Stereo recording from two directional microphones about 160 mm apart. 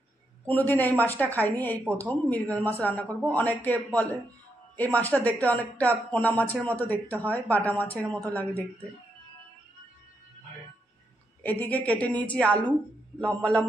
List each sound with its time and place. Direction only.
0.5 s speech: 10° left (ahead or behind)
7.2 s a woman's voice: 20° right (ahead or behind)
7.4 s speech: 10° left (ahead or behind)
11.4 s speech: 10° left (ahead or behind)